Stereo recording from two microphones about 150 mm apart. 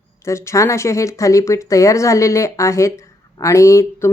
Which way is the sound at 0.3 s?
20° left (ahead or behind).